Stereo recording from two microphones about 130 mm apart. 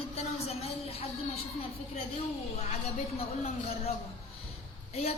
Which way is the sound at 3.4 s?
50° left (ahead or behind).